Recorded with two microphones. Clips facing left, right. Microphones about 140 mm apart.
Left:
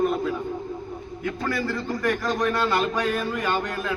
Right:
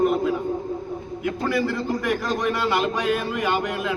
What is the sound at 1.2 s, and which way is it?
Speech, 15° right (ahead or behind).